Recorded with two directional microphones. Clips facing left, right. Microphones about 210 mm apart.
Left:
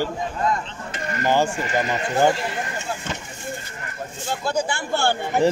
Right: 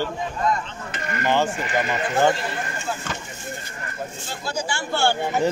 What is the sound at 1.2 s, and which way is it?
Speech, 10° left (ahead or behind).